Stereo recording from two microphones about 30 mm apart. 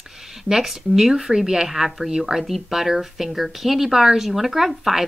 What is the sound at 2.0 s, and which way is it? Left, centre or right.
Speech, centre.